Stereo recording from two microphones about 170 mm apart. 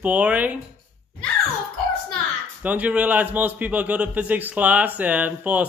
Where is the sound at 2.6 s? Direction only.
10° right (ahead or behind).